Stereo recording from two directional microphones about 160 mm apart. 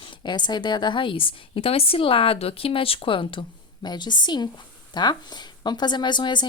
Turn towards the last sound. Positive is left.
turn(degrees=30)  # may be behind; listen again after turning